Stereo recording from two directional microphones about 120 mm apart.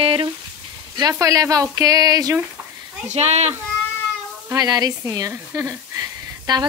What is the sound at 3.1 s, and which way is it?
Speech, 65° right (ahead or behind).